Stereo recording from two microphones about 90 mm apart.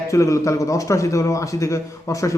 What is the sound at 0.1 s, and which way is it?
A man's voice, 35° left (ahead or behind).